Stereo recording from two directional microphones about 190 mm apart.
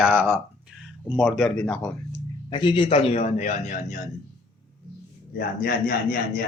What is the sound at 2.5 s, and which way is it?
A man's voice, 25° left (ahead or behind).